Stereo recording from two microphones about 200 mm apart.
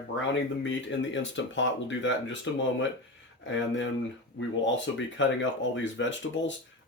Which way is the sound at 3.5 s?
65° left (ahead or behind).